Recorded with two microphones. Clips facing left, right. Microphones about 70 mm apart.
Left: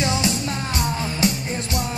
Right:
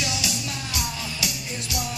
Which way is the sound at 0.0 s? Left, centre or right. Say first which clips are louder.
Left 7 dB; left.